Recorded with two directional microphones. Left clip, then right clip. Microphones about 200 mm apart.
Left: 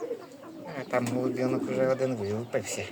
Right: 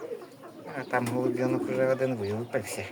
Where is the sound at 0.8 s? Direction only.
5° left (ahead or behind).